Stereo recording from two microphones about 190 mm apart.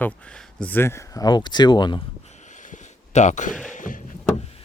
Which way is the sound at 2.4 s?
40° left (ahead or behind).